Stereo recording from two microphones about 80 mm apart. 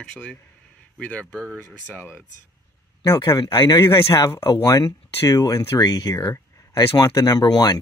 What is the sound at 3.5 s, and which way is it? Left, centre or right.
Speech, left.